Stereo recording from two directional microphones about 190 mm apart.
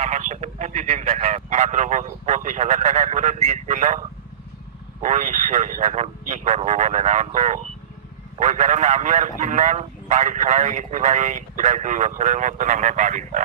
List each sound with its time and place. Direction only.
0.0 s speech: 40° right (ahead or behind)
5.0 s a man's voice: 40° right (ahead or behind)